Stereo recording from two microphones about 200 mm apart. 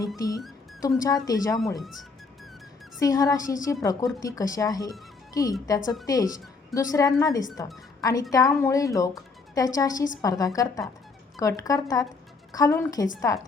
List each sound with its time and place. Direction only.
0.2 s speech: 15° left (ahead or behind)
3.0 s speech: 15° left (ahead or behind)